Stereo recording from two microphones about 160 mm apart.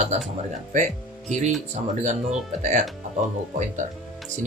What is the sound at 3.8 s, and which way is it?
Speech, 50° right (ahead or behind).